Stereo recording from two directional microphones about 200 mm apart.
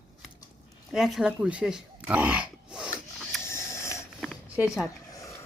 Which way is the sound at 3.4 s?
15° left (ahead or behind).